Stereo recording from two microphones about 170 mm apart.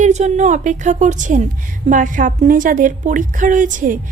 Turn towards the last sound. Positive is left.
turn(degrees=-50)  # may be behind; listen again after turning